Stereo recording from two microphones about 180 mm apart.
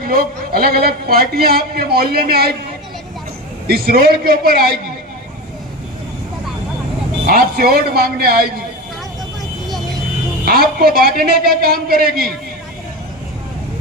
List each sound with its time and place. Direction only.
0.0 s a man's voice: 55° right (ahead or behind)
3.7 s a man's voice: 55° right (ahead or behind)
7.3 s a man's voice: 55° right (ahead or behind)
10.4 s a man's voice: 55° right (ahead or behind)